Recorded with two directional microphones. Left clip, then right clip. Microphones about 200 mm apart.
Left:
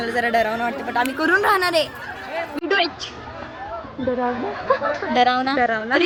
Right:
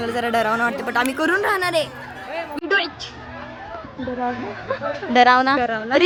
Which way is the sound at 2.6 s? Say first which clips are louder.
Even; centre (ahead or behind).